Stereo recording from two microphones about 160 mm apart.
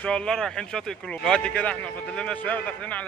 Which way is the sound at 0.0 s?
5° left (ahead or behind).